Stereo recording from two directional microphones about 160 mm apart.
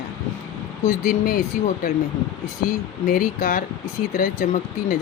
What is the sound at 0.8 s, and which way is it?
Speech, 55° left (ahead or behind).